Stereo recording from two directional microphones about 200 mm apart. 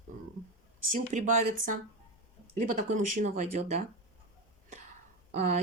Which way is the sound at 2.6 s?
40° right (ahead or behind).